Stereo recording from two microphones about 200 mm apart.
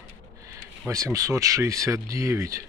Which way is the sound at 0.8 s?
15° right (ahead or behind).